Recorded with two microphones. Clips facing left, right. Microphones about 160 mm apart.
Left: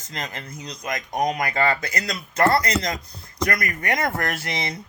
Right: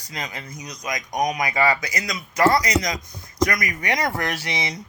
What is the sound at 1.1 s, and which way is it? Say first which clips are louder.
Speech: even; 15° right (ahead or behind).